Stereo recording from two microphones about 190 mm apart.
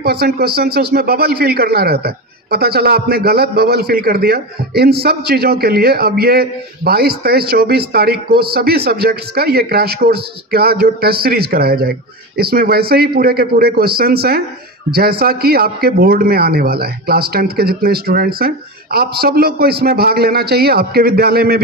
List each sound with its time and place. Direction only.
0.0 s a man's voice: 55° right (ahead or behind)